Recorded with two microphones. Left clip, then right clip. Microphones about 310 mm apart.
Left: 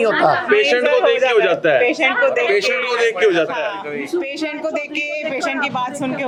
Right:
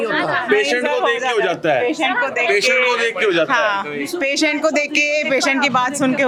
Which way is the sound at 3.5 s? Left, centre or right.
Right.